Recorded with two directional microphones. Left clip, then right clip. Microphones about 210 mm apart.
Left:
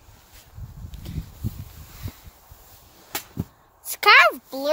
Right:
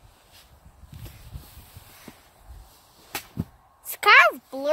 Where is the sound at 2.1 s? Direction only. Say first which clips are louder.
Left 2 dB; 10° left (ahead or behind).